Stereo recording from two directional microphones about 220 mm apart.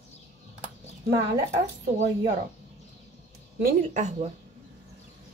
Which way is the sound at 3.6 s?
35° right (ahead or behind).